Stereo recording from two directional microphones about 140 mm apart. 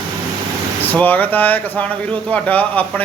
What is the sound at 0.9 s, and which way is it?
Speech, 10° left (ahead or behind).